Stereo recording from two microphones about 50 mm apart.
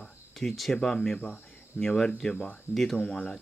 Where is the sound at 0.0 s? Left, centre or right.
Centre.